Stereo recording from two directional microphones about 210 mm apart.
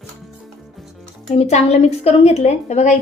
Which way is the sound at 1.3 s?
30° left (ahead or behind).